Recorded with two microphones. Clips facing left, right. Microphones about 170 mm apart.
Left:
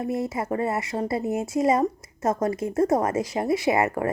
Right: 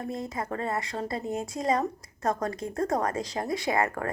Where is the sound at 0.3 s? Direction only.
25° left (ahead or behind).